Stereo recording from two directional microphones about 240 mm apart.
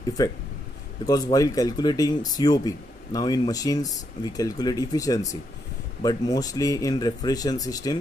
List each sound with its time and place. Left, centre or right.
0.2 s speech: centre